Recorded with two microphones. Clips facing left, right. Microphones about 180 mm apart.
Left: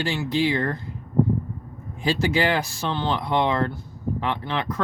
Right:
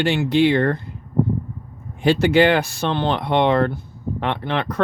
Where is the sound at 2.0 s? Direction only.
65° right (ahead or behind).